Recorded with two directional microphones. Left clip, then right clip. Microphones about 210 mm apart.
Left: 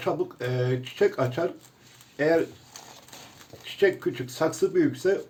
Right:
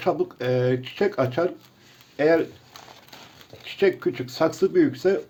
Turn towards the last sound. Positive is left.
turn(degrees=-45)  # may be behind; listen again after turning